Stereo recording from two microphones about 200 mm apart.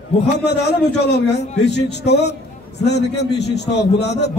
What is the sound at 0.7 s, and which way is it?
A man's voice, 55° left (ahead or behind).